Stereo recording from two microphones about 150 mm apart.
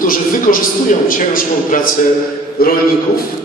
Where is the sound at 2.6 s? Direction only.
80° left.